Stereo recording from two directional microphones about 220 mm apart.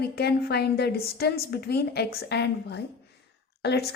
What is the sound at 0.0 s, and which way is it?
A woman's voice, 45° left (ahead or behind).